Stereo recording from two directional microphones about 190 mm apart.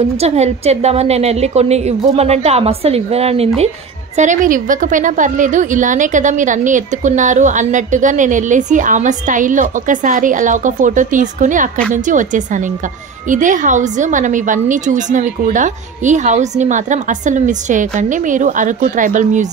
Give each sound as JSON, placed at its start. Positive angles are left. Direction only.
{"t": 0.2, "sound": "a woman's voice", "side_deg": -35}